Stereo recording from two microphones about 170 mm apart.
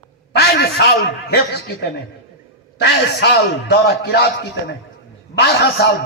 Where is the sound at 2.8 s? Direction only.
80° left.